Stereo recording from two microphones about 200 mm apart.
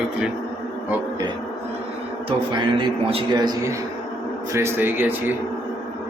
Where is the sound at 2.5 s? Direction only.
25° right (ahead or behind).